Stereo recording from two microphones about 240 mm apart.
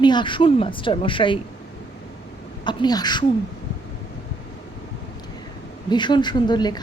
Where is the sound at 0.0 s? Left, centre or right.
Centre.